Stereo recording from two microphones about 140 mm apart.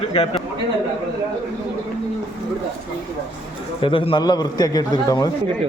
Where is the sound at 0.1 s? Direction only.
45° left (ahead or behind).